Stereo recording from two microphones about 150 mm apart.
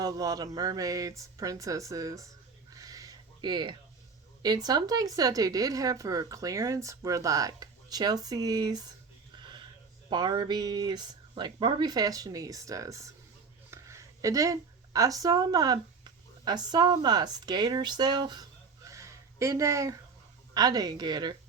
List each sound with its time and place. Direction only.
0.0 s a woman's voice: 25° right (ahead or behind)
2.7 s a sound: 25° right (ahead or behind)
4.4 s a woman's voice: 25° right (ahead or behind)
9.4 s wheeze: 30° right (ahead or behind)
10.1 s a woman's voice: 30° right (ahead or behind)
18.9 s a sound: 20° right (ahead or behind)
20.5 s a woman's voice: 25° right (ahead or behind)